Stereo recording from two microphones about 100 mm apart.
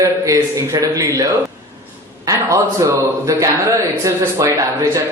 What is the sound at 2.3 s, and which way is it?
A man's voice, 30° right (ahead or behind).